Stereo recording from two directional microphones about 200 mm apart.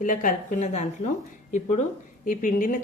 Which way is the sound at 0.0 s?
40° left (ahead or behind).